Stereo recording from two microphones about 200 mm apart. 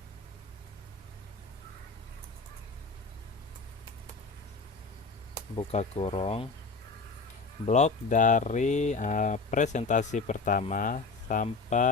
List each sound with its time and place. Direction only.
5.5 s speech: 30° left (ahead or behind)
7.7 s speech: 35° left (ahead or behind)